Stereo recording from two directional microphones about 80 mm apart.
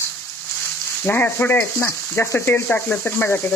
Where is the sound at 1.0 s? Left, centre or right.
Left.